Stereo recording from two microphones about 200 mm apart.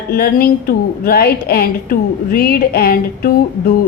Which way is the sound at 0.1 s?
50° left (ahead or behind).